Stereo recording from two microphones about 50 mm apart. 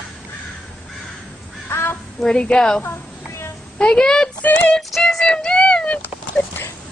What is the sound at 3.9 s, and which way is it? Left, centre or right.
Speech, centre.